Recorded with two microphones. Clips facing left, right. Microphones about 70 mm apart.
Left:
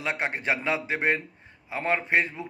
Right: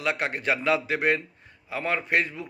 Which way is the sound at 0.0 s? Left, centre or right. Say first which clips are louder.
Right 2 dB; left.